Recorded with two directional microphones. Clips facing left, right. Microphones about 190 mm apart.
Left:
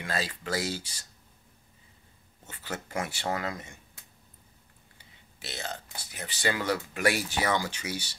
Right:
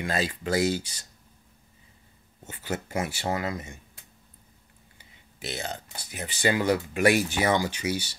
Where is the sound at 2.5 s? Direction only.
15° right (ahead or behind).